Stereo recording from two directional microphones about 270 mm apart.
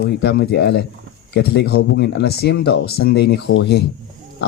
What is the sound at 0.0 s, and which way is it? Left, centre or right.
Speech, left.